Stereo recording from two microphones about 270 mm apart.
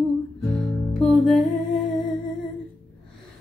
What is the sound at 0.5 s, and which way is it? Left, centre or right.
Music, centre.